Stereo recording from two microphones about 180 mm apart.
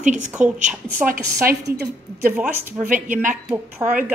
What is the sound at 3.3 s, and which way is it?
Speech, 10° right (ahead or behind).